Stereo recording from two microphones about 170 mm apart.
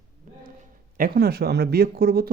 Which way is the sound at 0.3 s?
50° right (ahead or behind).